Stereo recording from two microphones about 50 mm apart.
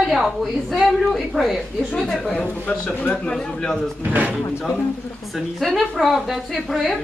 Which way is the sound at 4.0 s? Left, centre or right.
Right.